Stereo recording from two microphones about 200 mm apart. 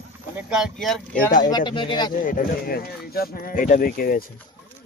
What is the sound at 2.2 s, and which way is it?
Speech, 45° left (ahead or behind).